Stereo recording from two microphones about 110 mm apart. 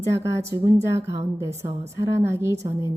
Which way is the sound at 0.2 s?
30° right (ahead or behind).